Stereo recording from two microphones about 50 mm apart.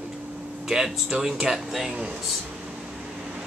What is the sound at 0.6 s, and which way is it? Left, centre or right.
Speech, centre.